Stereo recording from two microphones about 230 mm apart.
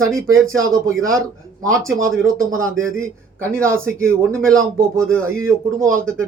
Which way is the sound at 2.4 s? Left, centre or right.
Right.